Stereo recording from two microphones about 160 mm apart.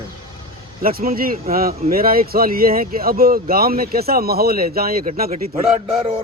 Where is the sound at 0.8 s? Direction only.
65° right (ahead or behind).